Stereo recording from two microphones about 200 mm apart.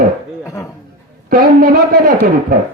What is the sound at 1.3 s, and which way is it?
Speech, 45° right (ahead or behind).